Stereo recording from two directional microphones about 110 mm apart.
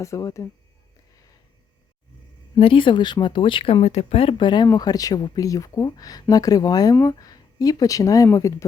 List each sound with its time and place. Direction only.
0.0 s speech: 30° left (ahead or behind)
2.6 s speech: 55° left (ahead or behind); by 8.6 s 25° left (ahead or behind)